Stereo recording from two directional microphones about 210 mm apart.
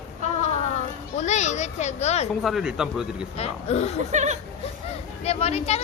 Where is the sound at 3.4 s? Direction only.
30° left (ahead or behind).